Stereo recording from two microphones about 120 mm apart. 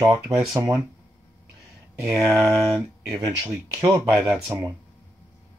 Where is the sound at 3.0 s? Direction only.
25° right (ahead or behind).